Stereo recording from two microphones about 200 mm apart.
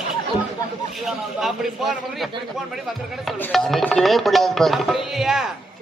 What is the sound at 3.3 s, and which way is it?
A man's voice, 5° left (ahead or behind).